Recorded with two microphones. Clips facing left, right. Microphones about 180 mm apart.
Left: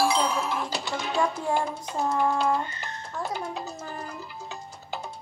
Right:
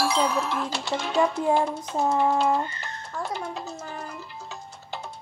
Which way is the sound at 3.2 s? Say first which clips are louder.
Even; centre (ahead or behind).